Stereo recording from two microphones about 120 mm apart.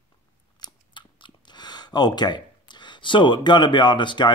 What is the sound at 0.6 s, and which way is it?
Speech, 40° left (ahead or behind).